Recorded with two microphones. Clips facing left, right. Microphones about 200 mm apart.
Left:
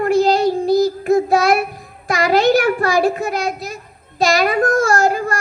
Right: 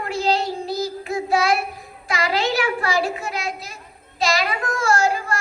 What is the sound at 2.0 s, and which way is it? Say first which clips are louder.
A child's voice: left 8 dB; 45° left (ahead or behind).